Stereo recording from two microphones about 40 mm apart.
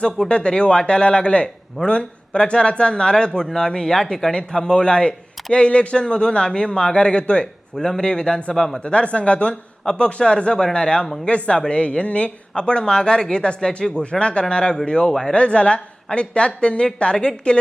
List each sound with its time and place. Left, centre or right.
0.0 s speech: left
8.8 s speech: left; by 13.9 s centre
13.9 s speech: left